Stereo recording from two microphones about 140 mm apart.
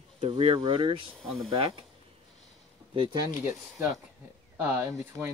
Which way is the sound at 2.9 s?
40° right (ahead or behind).